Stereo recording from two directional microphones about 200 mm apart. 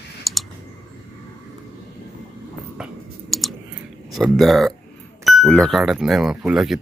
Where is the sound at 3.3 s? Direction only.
Centre (ahead or behind).